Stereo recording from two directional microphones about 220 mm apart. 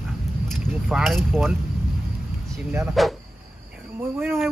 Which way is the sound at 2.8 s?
Centre (ahead or behind).